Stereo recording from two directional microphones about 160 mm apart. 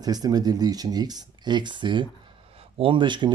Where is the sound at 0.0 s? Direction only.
25° right (ahead or behind).